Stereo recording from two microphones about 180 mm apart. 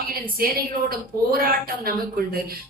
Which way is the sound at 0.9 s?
55° right (ahead or behind).